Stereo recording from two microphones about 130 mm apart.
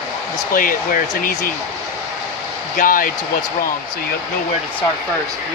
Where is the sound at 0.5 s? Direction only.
90° left.